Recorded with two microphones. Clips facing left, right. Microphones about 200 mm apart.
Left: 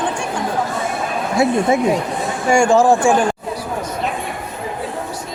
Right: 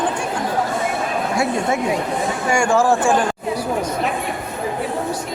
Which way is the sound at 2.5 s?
20° left (ahead or behind).